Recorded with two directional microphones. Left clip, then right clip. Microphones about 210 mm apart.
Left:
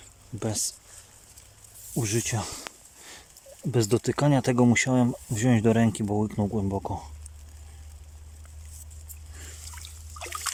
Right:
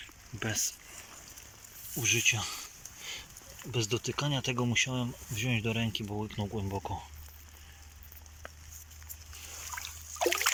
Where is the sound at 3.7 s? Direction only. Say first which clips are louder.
Left 8 dB; 40° left (ahead or behind); by 7.0 s 25° left (ahead or behind).